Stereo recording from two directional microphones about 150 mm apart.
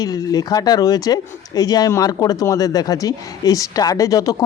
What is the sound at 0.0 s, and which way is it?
Speech, 25° left (ahead or behind).